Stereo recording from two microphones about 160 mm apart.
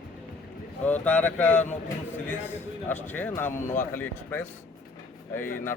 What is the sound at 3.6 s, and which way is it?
Speech, 50° left (ahead or behind).